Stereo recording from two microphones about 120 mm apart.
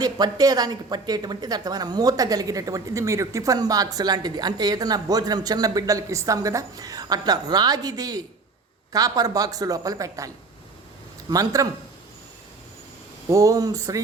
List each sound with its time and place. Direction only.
0.0 s speech: 30° right (ahead or behind)
13.2 s speech: 25° right (ahead or behind)